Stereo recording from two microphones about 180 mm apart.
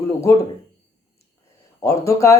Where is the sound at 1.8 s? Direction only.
15° left (ahead or behind).